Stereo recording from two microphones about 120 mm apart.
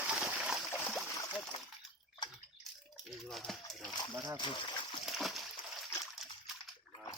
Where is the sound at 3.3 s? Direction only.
Centre (ahead or behind).